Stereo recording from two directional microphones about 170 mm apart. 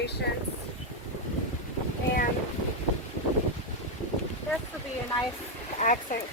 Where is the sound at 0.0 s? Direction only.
80° left.